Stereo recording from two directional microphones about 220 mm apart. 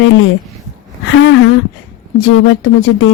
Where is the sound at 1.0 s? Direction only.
65° left (ahead or behind).